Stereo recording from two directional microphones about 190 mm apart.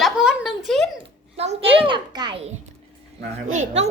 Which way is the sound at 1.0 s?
35° right (ahead or behind).